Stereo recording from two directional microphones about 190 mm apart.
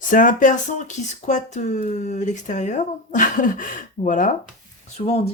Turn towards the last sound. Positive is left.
turn(degrees=35)  # may be behind; listen again after turning